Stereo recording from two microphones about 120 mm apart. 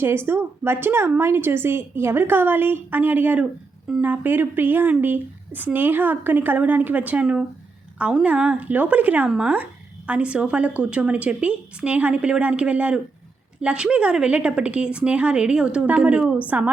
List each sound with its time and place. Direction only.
0.0 s a woman's voice: 20° right (ahead or behind)
4.0 s a woman's voice: 15° right (ahead or behind)